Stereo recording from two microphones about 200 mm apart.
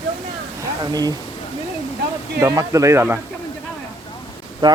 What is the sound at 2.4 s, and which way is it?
Speech, 15° right (ahead or behind).